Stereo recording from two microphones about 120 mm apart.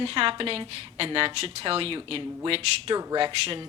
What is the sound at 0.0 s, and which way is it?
Speech, 50° right (ahead or behind).